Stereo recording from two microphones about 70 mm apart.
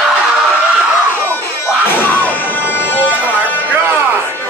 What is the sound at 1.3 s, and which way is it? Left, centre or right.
Music, left.